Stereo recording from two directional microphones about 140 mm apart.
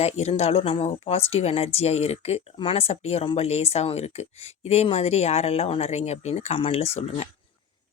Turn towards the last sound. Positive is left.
turn(degrees=50)  # may be behind; listen again after turning